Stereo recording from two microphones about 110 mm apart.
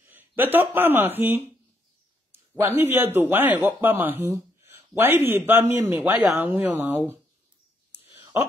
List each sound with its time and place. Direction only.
0.0 s a man's voice: 15° right (ahead or behind)